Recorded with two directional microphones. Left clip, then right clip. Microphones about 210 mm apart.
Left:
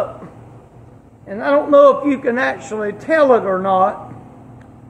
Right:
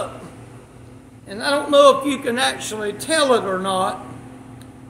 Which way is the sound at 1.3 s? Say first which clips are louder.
Left 5 dB; 25° right (ahead or behind).